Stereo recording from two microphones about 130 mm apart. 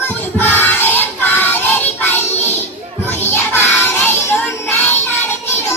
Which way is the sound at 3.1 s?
15° left (ahead or behind).